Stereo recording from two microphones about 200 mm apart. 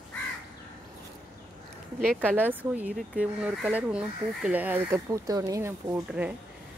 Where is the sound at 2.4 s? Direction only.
10° right (ahead or behind).